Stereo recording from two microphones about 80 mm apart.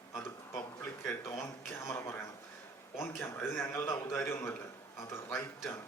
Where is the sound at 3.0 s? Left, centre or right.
Left.